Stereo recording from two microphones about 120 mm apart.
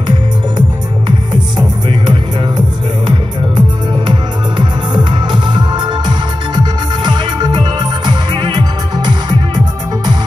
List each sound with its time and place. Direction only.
0.6 s music: 40° right (ahead or behind)